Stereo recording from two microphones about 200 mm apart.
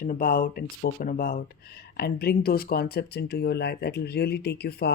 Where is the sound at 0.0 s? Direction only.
45° left (ahead or behind).